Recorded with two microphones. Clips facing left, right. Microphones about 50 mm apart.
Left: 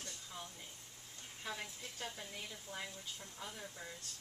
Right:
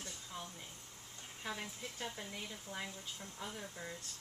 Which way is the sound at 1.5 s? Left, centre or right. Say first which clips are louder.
Right 2 dB; centre.